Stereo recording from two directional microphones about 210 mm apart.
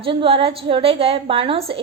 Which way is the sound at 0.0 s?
25° right (ahead or behind).